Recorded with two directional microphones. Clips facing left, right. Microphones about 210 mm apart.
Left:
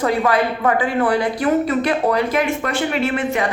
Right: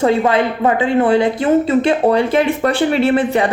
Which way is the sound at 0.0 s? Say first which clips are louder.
Right 4 dB; 25° right (ahead or behind).